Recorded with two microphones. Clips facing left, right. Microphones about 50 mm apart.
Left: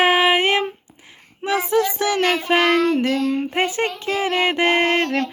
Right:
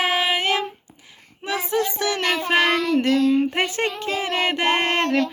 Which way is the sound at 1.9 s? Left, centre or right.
Left.